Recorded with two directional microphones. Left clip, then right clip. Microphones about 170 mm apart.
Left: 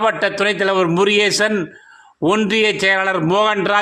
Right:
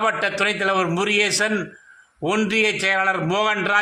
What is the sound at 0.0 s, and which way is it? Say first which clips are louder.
A man's voice: left 4 dB; 35° left (ahead or behind).